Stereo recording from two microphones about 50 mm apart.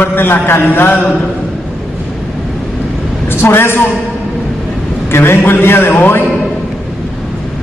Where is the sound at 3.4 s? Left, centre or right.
Left.